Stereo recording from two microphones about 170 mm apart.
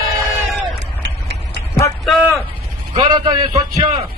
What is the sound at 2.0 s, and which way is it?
Speech, centre (ahead or behind).